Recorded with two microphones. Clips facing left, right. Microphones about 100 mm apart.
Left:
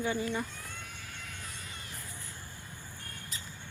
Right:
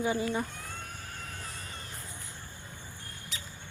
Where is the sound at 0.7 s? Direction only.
40° right (ahead or behind).